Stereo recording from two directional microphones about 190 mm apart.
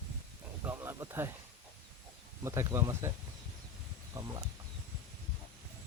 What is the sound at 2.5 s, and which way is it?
Speech, 15° right (ahead or behind).